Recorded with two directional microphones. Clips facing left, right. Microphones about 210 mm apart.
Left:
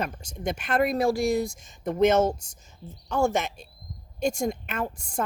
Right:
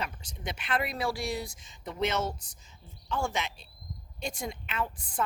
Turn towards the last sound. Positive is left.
turn(degrees=45)  # may be behind; listen again after turning